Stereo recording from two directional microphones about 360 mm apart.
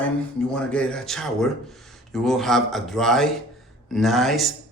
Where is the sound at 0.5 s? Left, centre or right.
Centre.